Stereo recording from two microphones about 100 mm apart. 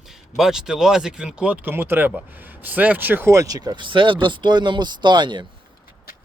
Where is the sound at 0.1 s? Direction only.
5° right (ahead or behind); by 3.4 s 25° right (ahead or behind).